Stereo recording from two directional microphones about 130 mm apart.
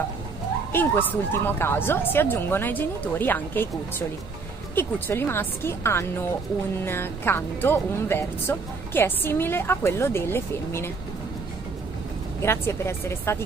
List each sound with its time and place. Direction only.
0.7 s speech: 15° left (ahead or behind)
4.7 s speech: 15° left (ahead or behind)
12.4 s a woman's voice: 20° left (ahead or behind)